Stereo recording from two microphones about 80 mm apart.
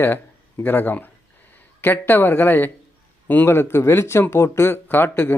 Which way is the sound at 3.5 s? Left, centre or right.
Left.